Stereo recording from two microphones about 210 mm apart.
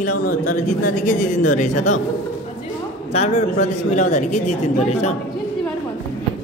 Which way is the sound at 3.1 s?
30° left (ahead or behind).